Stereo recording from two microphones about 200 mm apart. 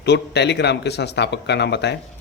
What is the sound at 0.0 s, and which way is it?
Speech, 55° left (ahead or behind).